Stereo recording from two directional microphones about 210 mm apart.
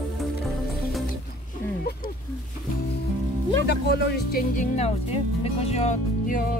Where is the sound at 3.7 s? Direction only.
50° left (ahead or behind).